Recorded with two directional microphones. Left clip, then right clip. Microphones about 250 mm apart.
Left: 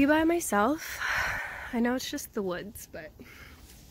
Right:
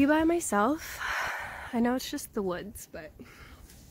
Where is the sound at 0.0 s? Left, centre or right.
Centre.